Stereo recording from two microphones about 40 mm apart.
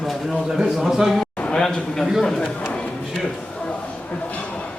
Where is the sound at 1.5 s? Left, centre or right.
Centre.